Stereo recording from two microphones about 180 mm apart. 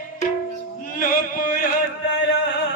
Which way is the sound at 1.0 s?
55° left (ahead or behind).